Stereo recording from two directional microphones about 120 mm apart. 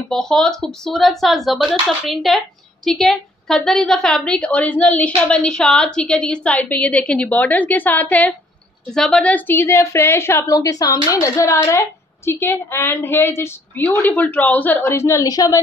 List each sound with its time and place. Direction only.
0.1 s a woman's voice: 5° left (ahead or behind); by 15.6 s 30° left (ahead or behind)